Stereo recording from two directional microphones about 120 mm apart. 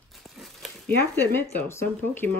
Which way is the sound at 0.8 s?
15° left (ahead or behind).